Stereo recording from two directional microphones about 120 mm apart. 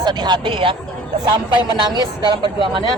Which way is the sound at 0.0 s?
40° right (ahead or behind).